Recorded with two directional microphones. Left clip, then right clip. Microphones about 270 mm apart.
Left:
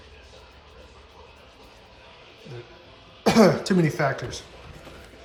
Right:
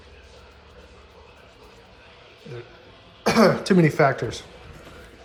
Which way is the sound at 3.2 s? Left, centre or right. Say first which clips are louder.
Even; left.